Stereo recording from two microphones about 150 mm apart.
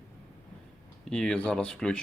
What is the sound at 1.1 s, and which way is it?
Speech, 5° left (ahead or behind).